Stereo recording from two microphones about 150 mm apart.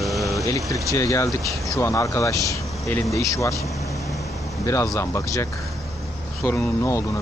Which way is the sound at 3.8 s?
20° left (ahead or behind).